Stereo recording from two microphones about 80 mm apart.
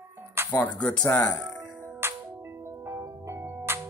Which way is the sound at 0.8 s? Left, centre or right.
Centre.